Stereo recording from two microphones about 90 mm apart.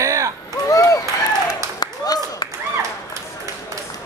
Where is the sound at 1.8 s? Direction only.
45° left (ahead or behind).